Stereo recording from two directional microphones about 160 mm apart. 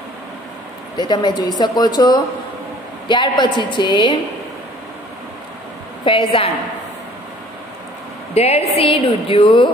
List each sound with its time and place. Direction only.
0.9 s speech: 25° left (ahead or behind)
6.0 s a woman's voice: 35° left (ahead or behind)
8.4 s a woman's voice: 40° left (ahead or behind)